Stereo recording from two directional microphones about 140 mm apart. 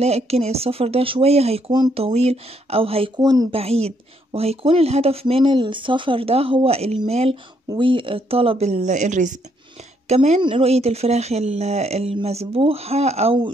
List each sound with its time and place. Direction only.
0.0 s speech: 50° right (ahead or behind)
3.2 s speech: 25° right (ahead or behind)
3.5 s speech: 45° right (ahead or behind)
7.7 s a woman's voice: 35° right (ahead or behind)